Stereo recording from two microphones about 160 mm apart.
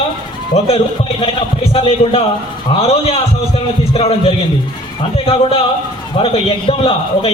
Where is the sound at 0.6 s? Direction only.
40° left (ahead or behind).